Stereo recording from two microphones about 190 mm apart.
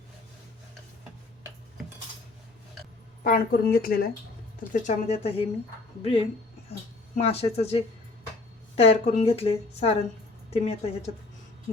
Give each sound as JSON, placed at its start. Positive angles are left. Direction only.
{"t": 3.2, "sound": "speech", "side_deg": 50}
{"t": 4.7, "sound": "a woman's voice", "side_deg": 35}